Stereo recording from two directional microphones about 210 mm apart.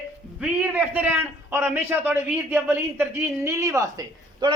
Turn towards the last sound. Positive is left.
turn(degrees=-15)  # may be behind; listen again after turning